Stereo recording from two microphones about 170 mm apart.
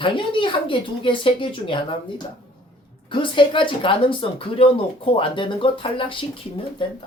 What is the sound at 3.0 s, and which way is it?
A woman's voice, 30° left (ahead or behind).